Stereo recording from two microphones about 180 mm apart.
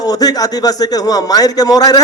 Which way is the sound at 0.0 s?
20° left (ahead or behind).